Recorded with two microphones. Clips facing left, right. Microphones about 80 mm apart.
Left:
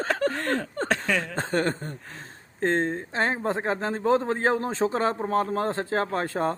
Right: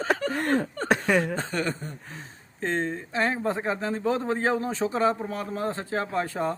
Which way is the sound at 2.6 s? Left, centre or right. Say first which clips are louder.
Left 3 dB; left.